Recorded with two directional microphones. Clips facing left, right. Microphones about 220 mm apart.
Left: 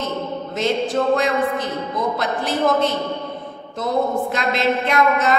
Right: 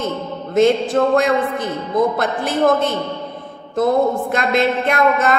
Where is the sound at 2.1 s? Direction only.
50° right (ahead or behind).